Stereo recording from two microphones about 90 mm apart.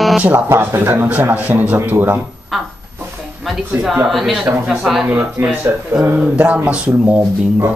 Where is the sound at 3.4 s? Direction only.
Centre (ahead or behind).